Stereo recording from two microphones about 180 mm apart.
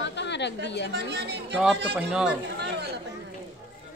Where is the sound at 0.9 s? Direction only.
65° right (ahead or behind).